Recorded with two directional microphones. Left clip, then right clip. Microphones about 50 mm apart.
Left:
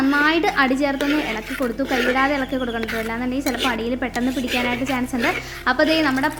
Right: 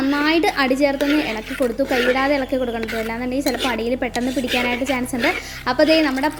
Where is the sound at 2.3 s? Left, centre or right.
Right.